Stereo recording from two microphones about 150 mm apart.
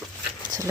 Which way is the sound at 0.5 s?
25° right (ahead or behind).